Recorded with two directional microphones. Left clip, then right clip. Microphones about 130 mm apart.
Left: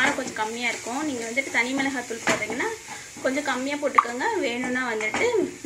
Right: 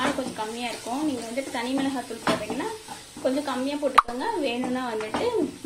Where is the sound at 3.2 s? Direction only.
Centre (ahead or behind).